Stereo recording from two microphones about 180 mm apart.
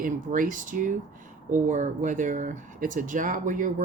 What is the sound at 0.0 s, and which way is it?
Speech, 45° right (ahead or behind).